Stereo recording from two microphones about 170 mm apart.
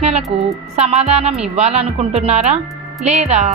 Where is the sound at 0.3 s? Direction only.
35° right (ahead or behind).